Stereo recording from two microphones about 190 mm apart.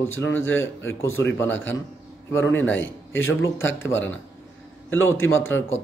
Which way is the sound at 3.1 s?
90° left.